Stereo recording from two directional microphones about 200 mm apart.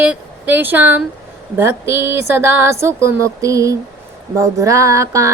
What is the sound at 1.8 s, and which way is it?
Female singing, 10° right (ahead or behind).